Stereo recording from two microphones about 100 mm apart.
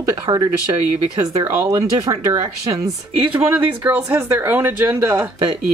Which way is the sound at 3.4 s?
20° right (ahead or behind).